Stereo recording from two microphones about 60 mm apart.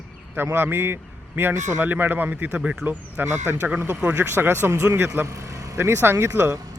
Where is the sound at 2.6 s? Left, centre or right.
Centre.